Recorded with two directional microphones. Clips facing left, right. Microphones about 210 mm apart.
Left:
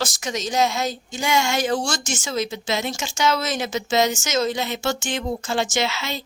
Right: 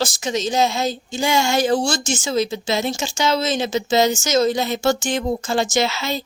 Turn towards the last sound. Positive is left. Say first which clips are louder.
# right 4 dB
turn(degrees=-40)  # may be behind; listen again after turning